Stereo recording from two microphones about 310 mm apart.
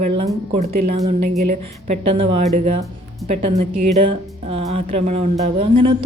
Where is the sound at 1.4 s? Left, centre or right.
Right.